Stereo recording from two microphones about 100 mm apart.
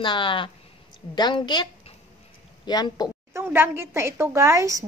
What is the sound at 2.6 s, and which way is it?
Speech, 45° left (ahead or behind).